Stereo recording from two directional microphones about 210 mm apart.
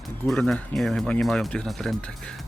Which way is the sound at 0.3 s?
5° left (ahead or behind).